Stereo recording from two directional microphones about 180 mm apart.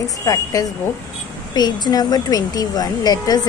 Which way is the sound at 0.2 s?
20° left (ahead or behind).